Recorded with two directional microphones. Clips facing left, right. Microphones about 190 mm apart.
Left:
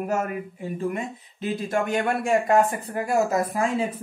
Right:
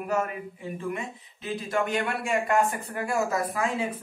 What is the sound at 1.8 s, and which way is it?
A man's voice, 45° left (ahead or behind).